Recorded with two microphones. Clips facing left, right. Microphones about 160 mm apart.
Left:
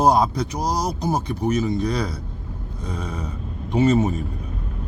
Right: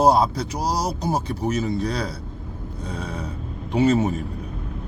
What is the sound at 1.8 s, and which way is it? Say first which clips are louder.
Speech: left 2 dB; 30° right (ahead or behind).